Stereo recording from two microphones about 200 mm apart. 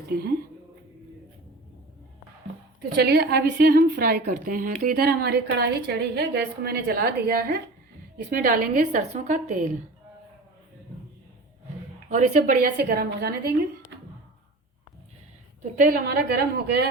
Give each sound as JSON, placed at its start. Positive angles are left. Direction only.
{"t": 2.9, "sound": "a woman's voice", "side_deg": -55}
{"t": 12.0, "sound": "a woman's voice", "side_deg": -40}
{"t": 15.6, "sound": "a woman's voice", "side_deg": -45}